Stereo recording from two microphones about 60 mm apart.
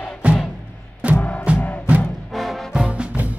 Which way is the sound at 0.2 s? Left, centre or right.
Centre.